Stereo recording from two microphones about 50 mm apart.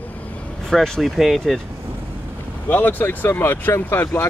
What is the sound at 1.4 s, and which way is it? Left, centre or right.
Speech, centre.